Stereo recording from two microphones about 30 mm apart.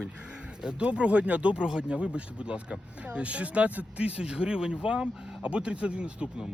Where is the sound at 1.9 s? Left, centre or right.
Right.